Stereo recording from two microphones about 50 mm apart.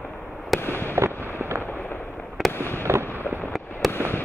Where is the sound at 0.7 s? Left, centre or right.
Left.